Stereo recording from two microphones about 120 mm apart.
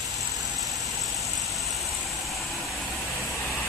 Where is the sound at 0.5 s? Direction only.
Centre (ahead or behind).